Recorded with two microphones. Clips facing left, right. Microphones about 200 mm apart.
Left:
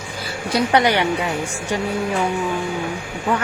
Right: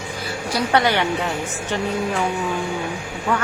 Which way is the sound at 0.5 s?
20° left (ahead or behind).